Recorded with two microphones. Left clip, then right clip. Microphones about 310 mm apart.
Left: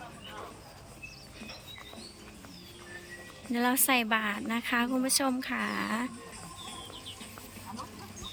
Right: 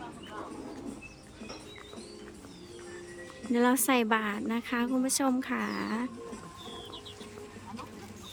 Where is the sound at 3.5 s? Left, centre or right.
Centre.